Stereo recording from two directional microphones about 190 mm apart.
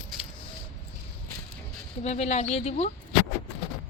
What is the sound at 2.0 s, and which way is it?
Speech, 35° left (ahead or behind).